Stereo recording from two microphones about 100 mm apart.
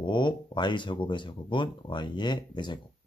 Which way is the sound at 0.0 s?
50° left (ahead or behind).